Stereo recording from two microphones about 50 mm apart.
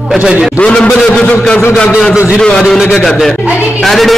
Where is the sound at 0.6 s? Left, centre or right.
Centre.